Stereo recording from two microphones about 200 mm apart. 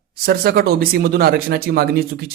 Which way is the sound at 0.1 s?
50° right (ahead or behind).